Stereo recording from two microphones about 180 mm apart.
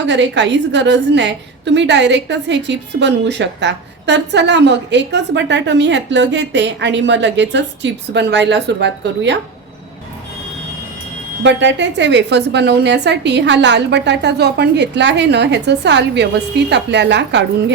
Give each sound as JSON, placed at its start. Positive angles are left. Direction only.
{"t": 0.0, "sound": "a woman's voice", "side_deg": -80}
{"t": 11.4, "sound": "a woman's voice", "side_deg": -80}